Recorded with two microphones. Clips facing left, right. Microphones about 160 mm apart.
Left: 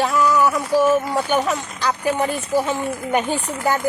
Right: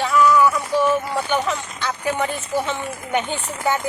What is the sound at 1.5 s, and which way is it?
Speech, 40° left (ahead or behind).